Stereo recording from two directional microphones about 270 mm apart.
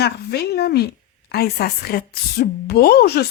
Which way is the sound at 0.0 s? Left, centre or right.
Left.